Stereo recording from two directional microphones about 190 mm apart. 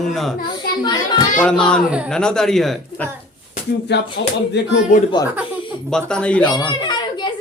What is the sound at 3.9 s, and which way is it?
Speech, 65° left (ahead or behind).